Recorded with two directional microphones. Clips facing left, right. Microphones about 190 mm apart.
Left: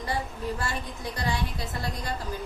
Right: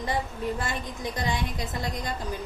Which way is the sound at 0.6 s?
20° right (ahead or behind).